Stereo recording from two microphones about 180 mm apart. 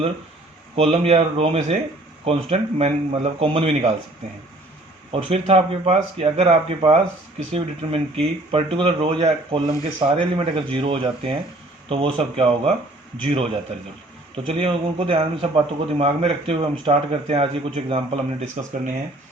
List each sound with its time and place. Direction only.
0.8 s a man's voice: 35° right (ahead or behind)
5.1 s a man's voice: 35° right (ahead or behind)